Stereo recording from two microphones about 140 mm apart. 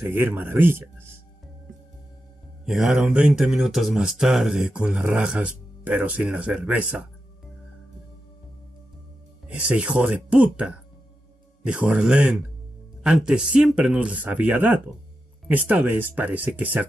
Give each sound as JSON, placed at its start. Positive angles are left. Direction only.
{"t": 0.0, "sound": "speech", "side_deg": -15}
{"t": 2.6, "sound": "speech", "side_deg": -5}
{"t": 9.5, "sound": "speech", "side_deg": -10}